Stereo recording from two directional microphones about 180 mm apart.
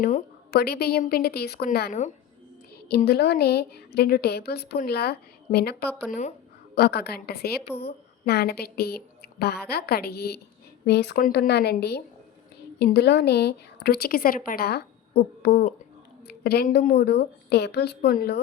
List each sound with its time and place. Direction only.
0.5 s a woman's voice: 60° left (ahead or behind); by 17.0 s 45° left (ahead or behind)
17.0 s a woman's voice: 65° left (ahead or behind)